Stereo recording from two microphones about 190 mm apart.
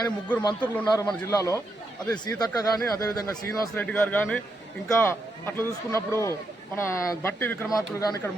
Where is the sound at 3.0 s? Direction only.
20° left (ahead or behind).